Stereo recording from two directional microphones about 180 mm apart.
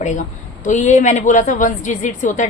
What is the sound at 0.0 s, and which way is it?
A woman's voice, 45° left (ahead or behind).